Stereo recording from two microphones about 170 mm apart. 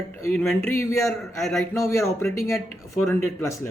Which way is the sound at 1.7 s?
15° left (ahead or behind).